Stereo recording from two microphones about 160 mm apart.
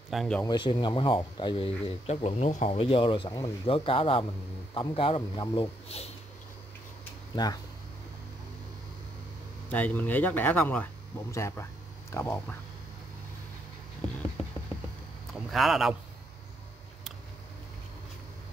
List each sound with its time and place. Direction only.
0.1 s speech: centre (ahead or behind)
0.5 s speech: 25° left (ahead or behind)
7.4 s speech: 25° left (ahead or behind)
9.7 s speech: 10° left (ahead or behind)
15.5 s speech: centre (ahead or behind)